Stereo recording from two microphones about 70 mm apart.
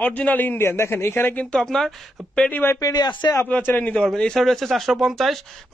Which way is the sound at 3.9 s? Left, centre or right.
Centre.